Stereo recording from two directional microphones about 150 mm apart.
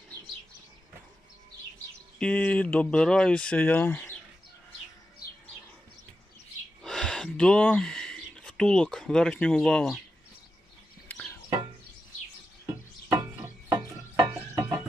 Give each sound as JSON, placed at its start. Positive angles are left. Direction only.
{"t": 2.1, "sound": "speech", "side_deg": 5}
{"t": 6.8, "sound": "speech", "side_deg": 5}
{"t": 12.6, "sound": "music", "side_deg": -15}